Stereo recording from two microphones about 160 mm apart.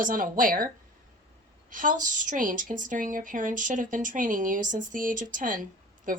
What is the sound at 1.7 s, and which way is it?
A woman's voice, 55° right (ahead or behind).